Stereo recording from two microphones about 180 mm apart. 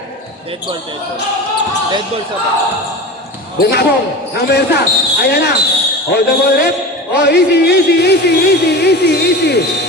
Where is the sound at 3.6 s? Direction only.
60° left (ahead or behind).